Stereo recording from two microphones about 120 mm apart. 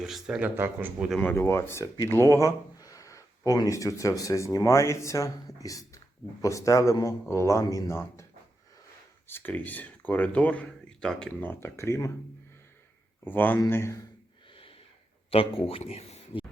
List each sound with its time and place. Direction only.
0.0 s speech: 5° right (ahead or behind)
1.2 s speech: 15° left (ahead or behind)
13.2 s speech: 15° left (ahead or behind)
15.3 s speech: 50° left (ahead or behind)